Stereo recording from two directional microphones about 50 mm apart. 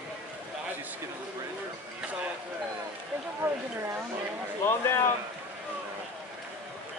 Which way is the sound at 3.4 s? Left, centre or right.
Right.